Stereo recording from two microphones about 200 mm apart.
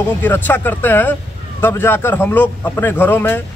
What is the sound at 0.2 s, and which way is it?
A man's voice, 10° left (ahead or behind).